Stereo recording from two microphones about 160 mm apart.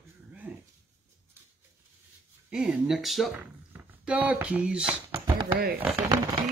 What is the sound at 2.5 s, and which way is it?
Speech, 5° right (ahead or behind).